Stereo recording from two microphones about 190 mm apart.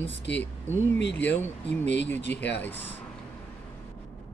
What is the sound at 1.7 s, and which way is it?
Speech, 65° left (ahead or behind).